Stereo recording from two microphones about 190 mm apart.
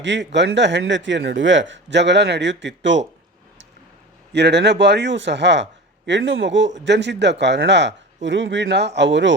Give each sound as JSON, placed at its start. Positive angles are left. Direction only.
{"t": 0.0, "sound": "a man's voice", "side_deg": -70}
{"t": 4.3, "sound": "a man's voice", "side_deg": -65}